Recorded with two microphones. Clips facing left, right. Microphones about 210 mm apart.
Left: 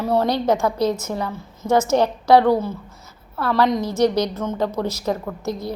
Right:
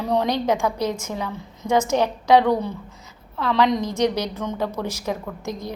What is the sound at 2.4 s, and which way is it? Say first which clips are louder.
Speech: left 3 dB; 5° left (ahead or behind).